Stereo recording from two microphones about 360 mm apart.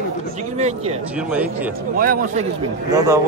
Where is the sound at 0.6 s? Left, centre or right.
Centre.